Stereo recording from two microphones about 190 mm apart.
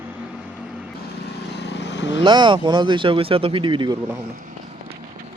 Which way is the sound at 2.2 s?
25° right (ahead or behind).